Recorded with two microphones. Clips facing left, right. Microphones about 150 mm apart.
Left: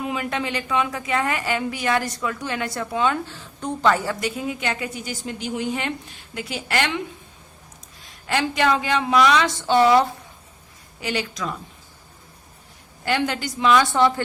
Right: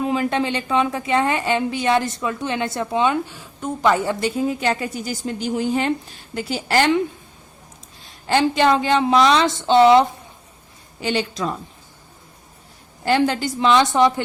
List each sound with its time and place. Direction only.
0.0 s a woman's voice: 30° right (ahead or behind)
8.3 s a woman's voice: 30° right (ahead or behind)
13.1 s a woman's voice: 30° right (ahead or behind)